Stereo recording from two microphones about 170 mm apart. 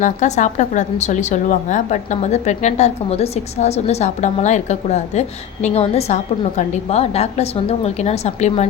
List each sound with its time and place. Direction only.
0.0 s a woman's voice: 45° left (ahead or behind)